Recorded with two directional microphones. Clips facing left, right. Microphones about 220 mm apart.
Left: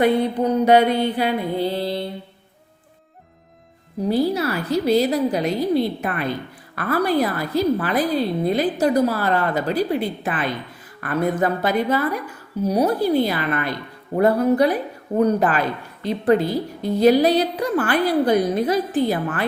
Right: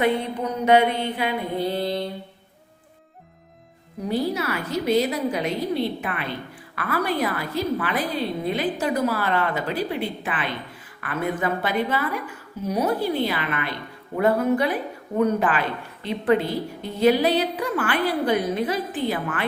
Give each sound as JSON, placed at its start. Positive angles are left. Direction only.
{"t": 0.0, "sound": "a woman's voice", "side_deg": 35}
{"t": 4.1, "sound": "a woman's voice", "side_deg": 35}